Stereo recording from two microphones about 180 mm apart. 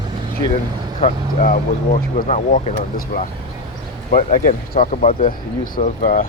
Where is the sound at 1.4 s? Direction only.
50° left (ahead or behind).